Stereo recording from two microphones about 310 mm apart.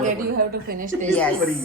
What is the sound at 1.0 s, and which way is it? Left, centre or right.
Speech, centre.